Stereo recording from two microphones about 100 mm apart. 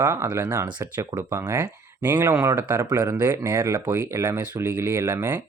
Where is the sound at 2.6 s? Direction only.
15° right (ahead or behind).